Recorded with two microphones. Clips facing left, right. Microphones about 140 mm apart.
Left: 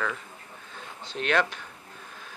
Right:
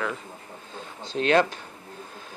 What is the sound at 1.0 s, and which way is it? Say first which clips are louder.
Speech: right 5 dB; 35° right (ahead or behind).